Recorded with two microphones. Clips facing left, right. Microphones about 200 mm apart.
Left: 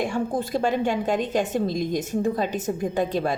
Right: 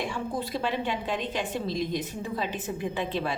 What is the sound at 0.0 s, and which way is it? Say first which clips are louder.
A woman's voice: left 6 dB; 45° left (ahead or behind).